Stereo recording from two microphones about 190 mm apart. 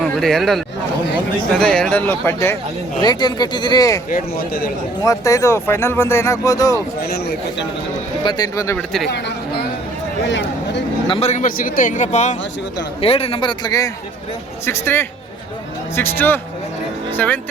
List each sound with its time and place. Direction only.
0.0 s speech: centre (ahead or behind); by 4.0 s 20° left (ahead or behind)
4.1 s speech: 50° left (ahead or behind)
5.0 s speech: 15° left (ahead or behind)
8.2 s speech: 25° left (ahead or behind)
9.0 s speech: 60° left (ahead or behind)
11.1 s a man's voice: 35° left (ahead or behind); by 17.4 s 10° left (ahead or behind)